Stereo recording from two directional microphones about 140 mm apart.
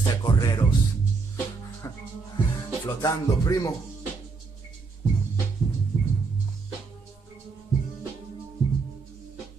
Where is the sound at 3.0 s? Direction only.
25° left (ahead or behind).